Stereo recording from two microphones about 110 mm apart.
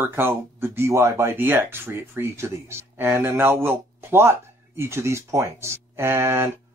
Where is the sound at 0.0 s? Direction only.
20° right (ahead or behind).